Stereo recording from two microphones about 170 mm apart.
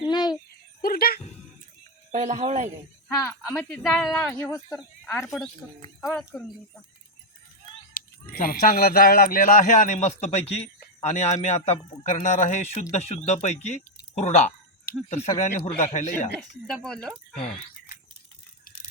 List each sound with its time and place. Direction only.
0.0 s a sound: 25° left (ahead or behind)
0.8 s a sound: 60° left (ahead or behind)
2.1 s speech: 45° right (ahead or behind)
3.2 s speech: 10° left (ahead or behind)
5.2 s speech: centre (ahead or behind)
7.9 s speech: 60° left (ahead or behind)
16.6 s speech: 5° left (ahead or behind)